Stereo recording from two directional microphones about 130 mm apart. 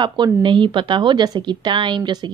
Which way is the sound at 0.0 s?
35° right (ahead or behind).